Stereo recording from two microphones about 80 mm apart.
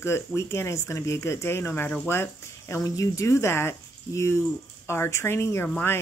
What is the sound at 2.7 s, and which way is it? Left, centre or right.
Speech, left.